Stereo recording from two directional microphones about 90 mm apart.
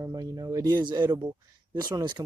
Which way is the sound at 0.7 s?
55° right (ahead or behind).